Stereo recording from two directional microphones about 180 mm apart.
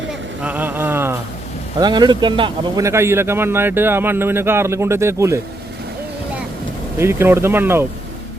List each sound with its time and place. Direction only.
0.1 s a sound: 10° right (ahead or behind)
1.8 s speech: 25° right (ahead or behind)
2.8 s a man's voice: 15° right (ahead or behind)
7.0 s a man's voice: 15° right (ahead or behind)